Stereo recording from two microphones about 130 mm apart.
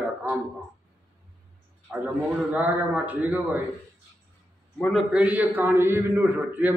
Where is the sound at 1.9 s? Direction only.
15° right (ahead or behind).